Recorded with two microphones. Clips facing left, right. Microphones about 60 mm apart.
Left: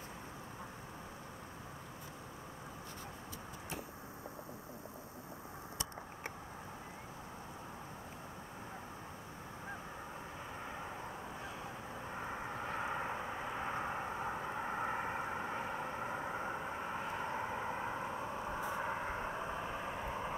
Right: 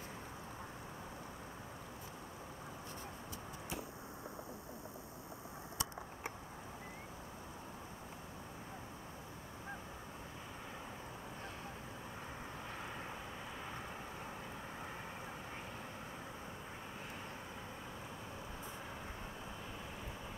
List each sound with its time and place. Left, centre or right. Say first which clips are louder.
12.1 s vehicle: left 9 dB; left